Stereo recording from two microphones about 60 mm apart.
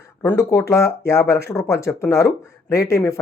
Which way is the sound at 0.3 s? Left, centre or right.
Left.